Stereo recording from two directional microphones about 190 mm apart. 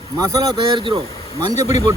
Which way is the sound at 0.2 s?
20° right (ahead or behind).